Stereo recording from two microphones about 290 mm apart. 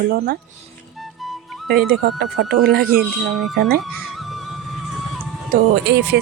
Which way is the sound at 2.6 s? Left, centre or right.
Right.